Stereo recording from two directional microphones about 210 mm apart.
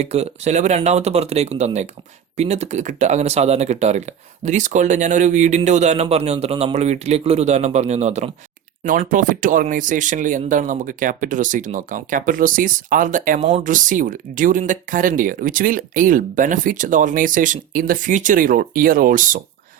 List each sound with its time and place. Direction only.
0.0 s speech: 30° right (ahead or behind)